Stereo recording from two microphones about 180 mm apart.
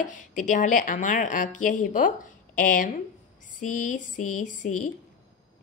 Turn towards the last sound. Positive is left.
turn(degrees=45)  # may be behind; listen again after turning